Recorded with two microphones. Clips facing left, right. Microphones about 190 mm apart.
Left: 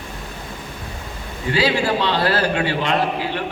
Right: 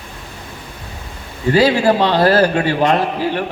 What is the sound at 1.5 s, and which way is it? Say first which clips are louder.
A man's voice: right 6 dB; 45° right (ahead or behind).